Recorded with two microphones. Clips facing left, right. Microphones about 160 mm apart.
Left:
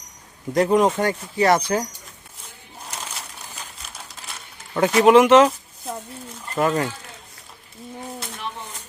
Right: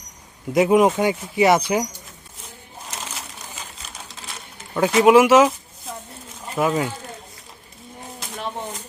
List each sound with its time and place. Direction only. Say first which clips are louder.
0.5 s speech: right 2 dB; 5° right (ahead or behind)
4.7 s speech: even; centre (ahead or behind)